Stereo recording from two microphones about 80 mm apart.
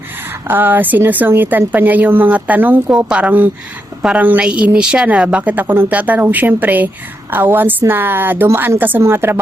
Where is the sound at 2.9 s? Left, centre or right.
Centre.